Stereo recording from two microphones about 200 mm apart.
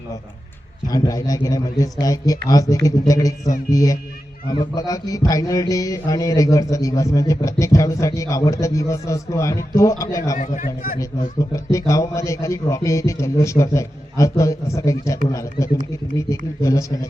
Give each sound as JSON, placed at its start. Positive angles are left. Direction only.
{"t": 0.9, "sound": "music", "side_deg": 15}
{"t": 10.3, "sound": "speech", "side_deg": 40}
{"t": 11.3, "sound": "music", "side_deg": 15}